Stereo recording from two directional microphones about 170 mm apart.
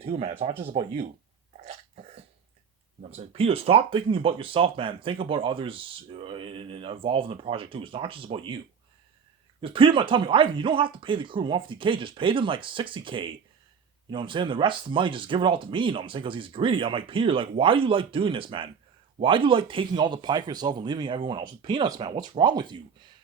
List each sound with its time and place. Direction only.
0.0 s speech: 35° right (ahead or behind)
3.0 s speech: 40° right (ahead or behind)
9.6 s speech: 30° right (ahead or behind)